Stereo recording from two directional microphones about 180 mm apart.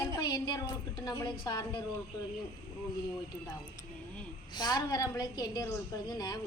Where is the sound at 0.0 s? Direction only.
20° left (ahead or behind).